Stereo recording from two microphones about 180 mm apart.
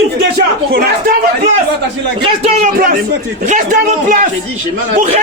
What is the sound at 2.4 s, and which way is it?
Speech, 50° right (ahead or behind).